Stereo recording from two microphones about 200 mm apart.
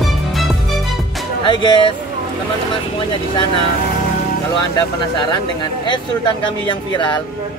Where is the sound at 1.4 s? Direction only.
25° left (ahead or behind).